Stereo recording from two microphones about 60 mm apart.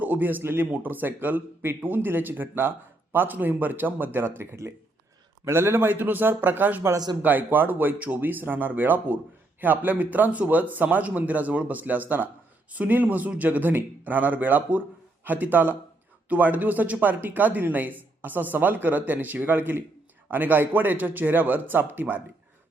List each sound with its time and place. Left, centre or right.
0.0 s speech: right
5.5 s speech: right